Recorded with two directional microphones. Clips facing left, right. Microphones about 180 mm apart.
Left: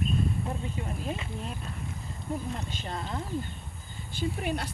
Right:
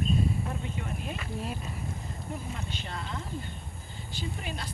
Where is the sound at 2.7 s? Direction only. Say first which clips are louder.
Left 2 dB; 45° left (ahead or behind).